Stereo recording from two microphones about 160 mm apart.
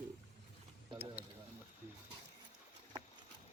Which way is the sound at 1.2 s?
10° right (ahead or behind).